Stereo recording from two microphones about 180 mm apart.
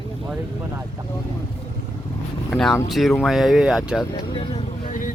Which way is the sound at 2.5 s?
5° left (ahead or behind).